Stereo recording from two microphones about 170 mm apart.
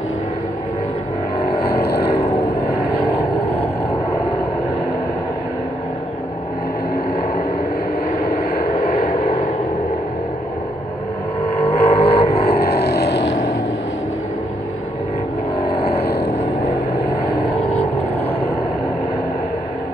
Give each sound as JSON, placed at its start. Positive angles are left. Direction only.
{"t": 1.6, "sound": "vehicle", "side_deg": 70}
{"t": 3.1, "sound": "vehicle", "side_deg": 35}
{"t": 8.2, "sound": "vehicle", "side_deg": 40}
{"t": 11.6, "sound": "vehicle", "side_deg": 35}
{"t": 12.4, "sound": "vehicle", "side_deg": 65}
{"t": 15.7, "sound": "vehicle", "side_deg": 35}
{"t": 17.0, "sound": "vehicle", "side_deg": 65}